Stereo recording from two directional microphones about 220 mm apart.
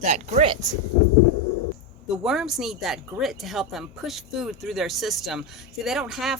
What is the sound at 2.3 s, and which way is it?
Speech, centre (ahead or behind).